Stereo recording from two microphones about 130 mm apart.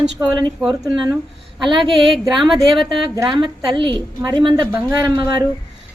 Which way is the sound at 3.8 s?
40° right (ahead or behind).